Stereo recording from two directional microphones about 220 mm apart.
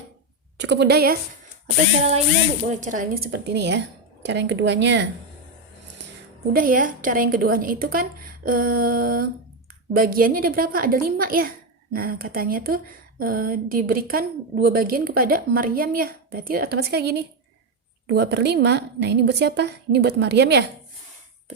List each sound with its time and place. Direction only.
0.5 s a woman's voice: 50° right (ahead or behind)
2.6 s a woman's voice: 35° right (ahead or behind); by 5.0 s 55° right (ahead or behind)
6.5 s a woman's voice: 40° right (ahead or behind)